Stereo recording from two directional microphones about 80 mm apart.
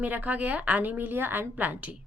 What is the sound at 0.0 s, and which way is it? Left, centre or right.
A woman's voice, right.